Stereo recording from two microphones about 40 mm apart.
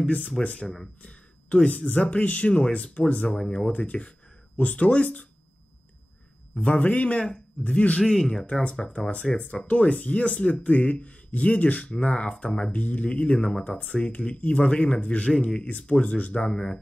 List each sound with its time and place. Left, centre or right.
0.4 s speech: left
6.5 s speech: left
8.0 s speech: centre
8.3 s speech: left
12.7 s speech: left
14.4 s speech: left
14.7 s speech: left
15.4 s speech: left